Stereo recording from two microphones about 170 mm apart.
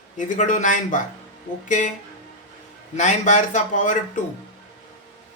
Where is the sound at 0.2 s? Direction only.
45° left (ahead or behind).